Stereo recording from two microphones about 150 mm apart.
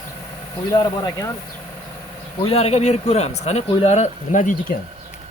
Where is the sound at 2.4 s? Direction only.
40° left (ahead or behind); by 4.7 s 60° left (ahead or behind).